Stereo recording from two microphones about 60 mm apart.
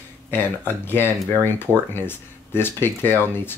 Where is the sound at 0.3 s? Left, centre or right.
Left.